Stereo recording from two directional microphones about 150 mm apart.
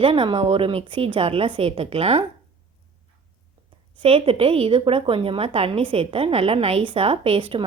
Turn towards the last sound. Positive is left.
turn(degrees=-35)  # may be behind; listen again after turning